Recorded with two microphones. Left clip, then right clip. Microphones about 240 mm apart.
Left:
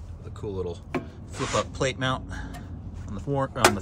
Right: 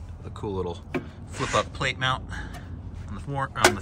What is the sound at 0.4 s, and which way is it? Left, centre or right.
Speech, centre.